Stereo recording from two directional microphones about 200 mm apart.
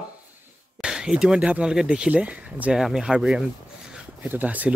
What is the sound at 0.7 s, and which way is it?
Speech, 5° right (ahead or behind).